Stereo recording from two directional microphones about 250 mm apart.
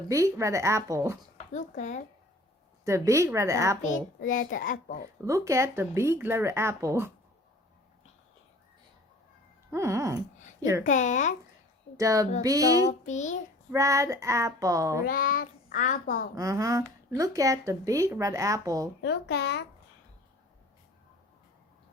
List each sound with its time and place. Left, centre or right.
0.1 s speech: centre
1.5 s speech: left
2.8 s speech: centre
3.8 s a child's voice: left
5.2 s speech: centre
9.7 s speech: centre
10.8 s speech: left
11.9 s speech: centre
12.9 s speech: left
13.7 s speech: centre
15.0 s a child's voice: left
16.3 s speech: centre
19.0 s a child's voice: left